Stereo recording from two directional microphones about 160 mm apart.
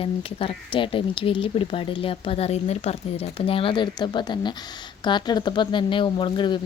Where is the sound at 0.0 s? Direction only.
35° left (ahead or behind).